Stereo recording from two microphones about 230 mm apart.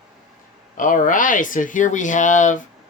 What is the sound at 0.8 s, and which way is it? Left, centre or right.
Speech, left.